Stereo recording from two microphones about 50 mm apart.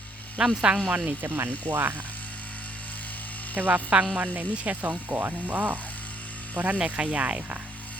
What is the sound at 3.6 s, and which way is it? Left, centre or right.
Speech, right.